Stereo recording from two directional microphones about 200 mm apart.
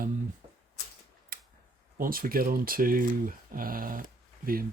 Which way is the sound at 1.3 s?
45° right (ahead or behind).